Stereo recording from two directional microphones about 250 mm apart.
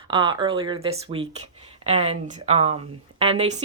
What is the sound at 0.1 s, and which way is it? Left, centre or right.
Speech, centre.